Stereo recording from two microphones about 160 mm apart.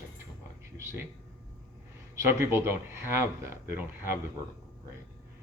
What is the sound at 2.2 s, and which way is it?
Speech, 15° right (ahead or behind).